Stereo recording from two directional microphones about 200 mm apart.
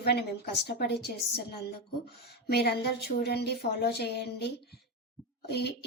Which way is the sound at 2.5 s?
55° left (ahead or behind).